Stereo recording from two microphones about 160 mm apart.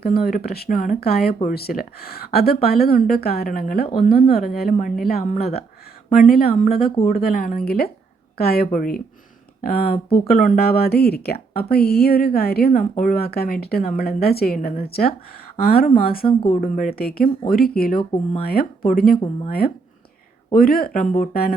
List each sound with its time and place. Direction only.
0.0 s speech: 75° left (ahead or behind)
6.3 s speech: 70° left (ahead or behind)
8.7 s speech: 60° left (ahead or behind)